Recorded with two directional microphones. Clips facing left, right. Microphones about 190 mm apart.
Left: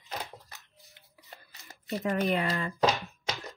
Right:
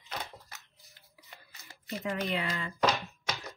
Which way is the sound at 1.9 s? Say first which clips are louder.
Left 5 dB; 45° left (ahead or behind).